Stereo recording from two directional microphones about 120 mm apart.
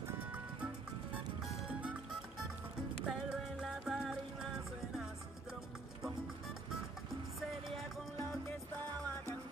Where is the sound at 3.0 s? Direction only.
5° right (ahead or behind).